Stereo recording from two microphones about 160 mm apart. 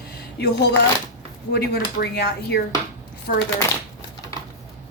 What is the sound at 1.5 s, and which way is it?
Speech, 80° left.